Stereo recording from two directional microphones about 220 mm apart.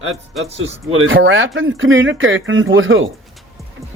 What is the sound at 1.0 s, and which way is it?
Speech, 60° right (ahead or behind).